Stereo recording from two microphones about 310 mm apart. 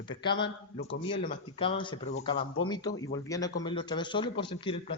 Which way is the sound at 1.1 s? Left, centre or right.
Left.